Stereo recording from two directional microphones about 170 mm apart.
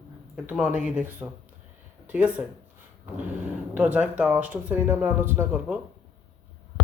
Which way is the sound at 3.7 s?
10° right (ahead or behind).